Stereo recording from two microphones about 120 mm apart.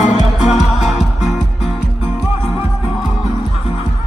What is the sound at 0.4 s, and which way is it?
Music, centre (ahead or behind).